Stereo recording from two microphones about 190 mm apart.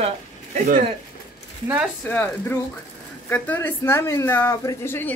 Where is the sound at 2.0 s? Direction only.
10° left (ahead or behind).